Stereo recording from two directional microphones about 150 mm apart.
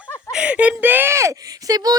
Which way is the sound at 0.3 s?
10° right (ahead or behind).